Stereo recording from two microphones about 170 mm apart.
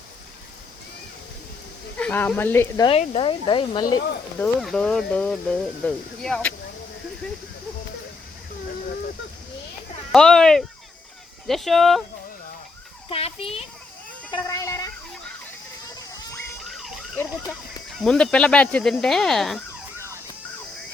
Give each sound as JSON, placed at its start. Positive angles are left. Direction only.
{"t": 2.0, "sound": "speech", "side_deg": 10}
{"t": 2.8, "sound": "speech", "side_deg": 35}
{"t": 4.4, "sound": "speech", "side_deg": 5}
{"t": 10.1, "sound": "speech", "side_deg": 5}
{"t": 13.1, "sound": "a child's voice", "side_deg": 35}
{"t": 14.3, "sound": "speech", "side_deg": 25}
{"t": 18.0, "sound": "speech", "side_deg": 5}